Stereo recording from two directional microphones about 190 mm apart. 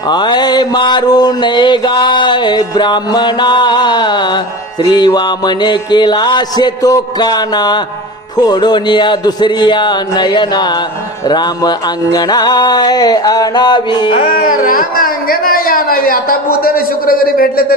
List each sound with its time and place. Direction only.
0.1 s mantra: 20° left (ahead or behind)
14.4 s speech: 45° left (ahead or behind)